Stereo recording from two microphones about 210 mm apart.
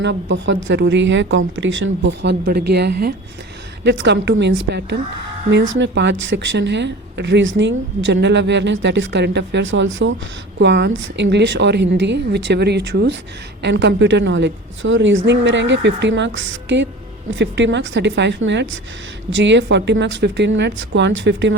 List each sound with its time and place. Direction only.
0.0 s a woman's voice: 55° right (ahead or behind)